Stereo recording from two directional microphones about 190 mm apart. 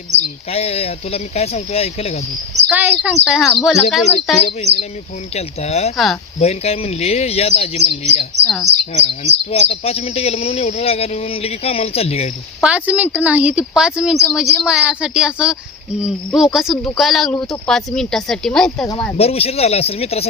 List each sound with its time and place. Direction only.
0.5 s speech: 35° left (ahead or behind)
2.6 s a woman's voice: 5° right (ahead or behind)
4.4 s speech: 30° left (ahead or behind)
8.4 s a woman's voice: centre (ahead or behind)
8.9 s speech: 35° left (ahead or behind)
12.6 s a woman's voice: 5° right (ahead or behind)
19.1 s speech: 30° left (ahead or behind)